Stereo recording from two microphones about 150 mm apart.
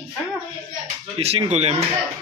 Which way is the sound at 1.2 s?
45° right (ahead or behind).